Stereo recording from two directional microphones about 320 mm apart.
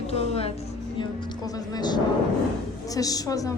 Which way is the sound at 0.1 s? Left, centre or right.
Centre.